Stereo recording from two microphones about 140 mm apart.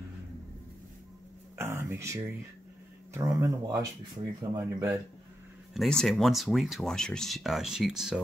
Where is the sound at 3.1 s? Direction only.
20° right (ahead or behind).